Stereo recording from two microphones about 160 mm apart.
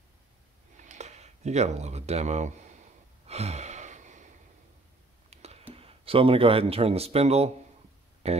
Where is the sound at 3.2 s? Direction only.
40° right (ahead or behind).